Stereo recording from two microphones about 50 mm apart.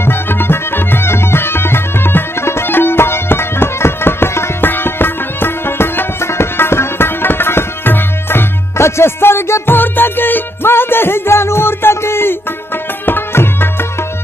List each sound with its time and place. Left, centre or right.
0.0 s music: left
4.6 s music: left
8.7 s music: left
9.8 s music: left